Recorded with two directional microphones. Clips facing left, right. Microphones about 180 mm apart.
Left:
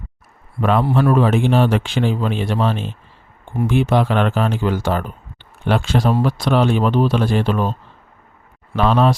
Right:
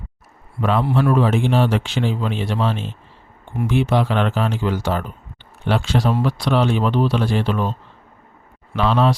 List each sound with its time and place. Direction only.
0.6 s speech: 55° left (ahead or behind)
8.7 s speech: 50° left (ahead or behind)